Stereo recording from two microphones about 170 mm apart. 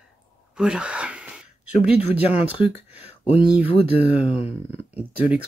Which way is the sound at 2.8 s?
10° right (ahead or behind).